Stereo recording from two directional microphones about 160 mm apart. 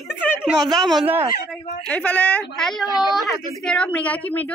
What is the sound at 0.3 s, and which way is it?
A woman's voice, centre (ahead or behind).